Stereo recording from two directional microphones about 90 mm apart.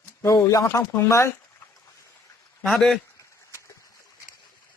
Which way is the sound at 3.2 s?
35° left (ahead or behind).